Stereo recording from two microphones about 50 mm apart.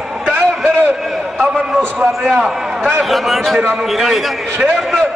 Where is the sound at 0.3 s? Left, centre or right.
Right.